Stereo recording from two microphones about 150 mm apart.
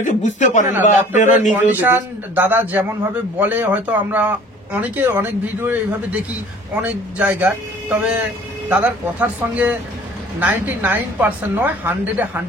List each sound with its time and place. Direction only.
0.0 s a man's voice: 55° left (ahead or behind)
1.7 s speech: 10° right (ahead or behind)